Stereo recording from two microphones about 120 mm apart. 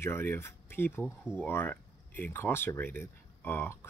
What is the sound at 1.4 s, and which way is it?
Speech, 15° left (ahead or behind).